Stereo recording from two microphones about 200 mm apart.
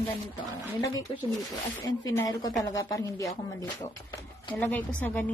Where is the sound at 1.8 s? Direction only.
15° left (ahead or behind).